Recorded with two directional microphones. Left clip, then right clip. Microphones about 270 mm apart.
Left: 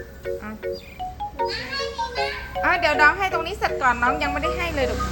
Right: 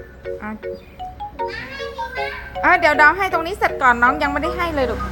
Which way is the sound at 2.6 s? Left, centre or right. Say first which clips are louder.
Right 5 dB; right.